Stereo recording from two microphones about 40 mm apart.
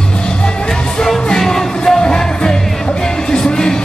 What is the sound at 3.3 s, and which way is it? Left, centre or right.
Music, centre.